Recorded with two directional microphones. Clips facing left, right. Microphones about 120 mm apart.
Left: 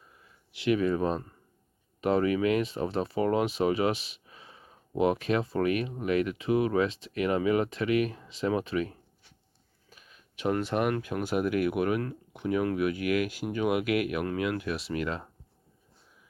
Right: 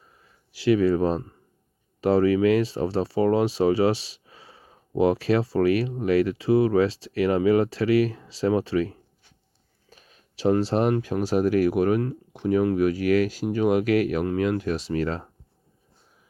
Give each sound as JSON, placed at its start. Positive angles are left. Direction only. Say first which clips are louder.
{"t": 0.5, "sound": "speech", "louder": "right 6 dB", "side_deg": -30}
{"t": 9.9, "sound": "speech", "louder": "right 2 dB", "side_deg": -35}